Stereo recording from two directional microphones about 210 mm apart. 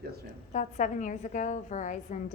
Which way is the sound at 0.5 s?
35° left (ahead or behind).